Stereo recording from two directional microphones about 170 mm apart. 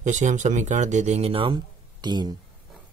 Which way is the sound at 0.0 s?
45° right (ahead or behind).